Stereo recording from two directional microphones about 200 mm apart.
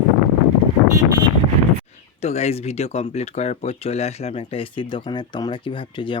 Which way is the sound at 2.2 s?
30° left (ahead or behind).